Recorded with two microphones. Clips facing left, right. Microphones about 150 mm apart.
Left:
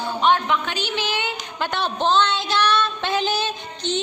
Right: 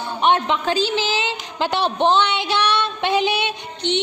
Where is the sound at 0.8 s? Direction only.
90° right.